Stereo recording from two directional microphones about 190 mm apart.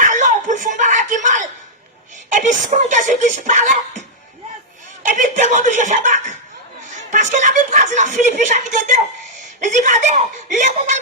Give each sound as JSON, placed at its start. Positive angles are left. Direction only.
{"t": 0.0, "sound": "a sound", "side_deg": -40}
{"t": 2.3, "sound": "speech", "side_deg": -40}
{"t": 5.0, "sound": "speech", "side_deg": -40}